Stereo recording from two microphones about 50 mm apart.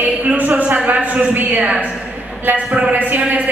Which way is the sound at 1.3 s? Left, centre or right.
Right.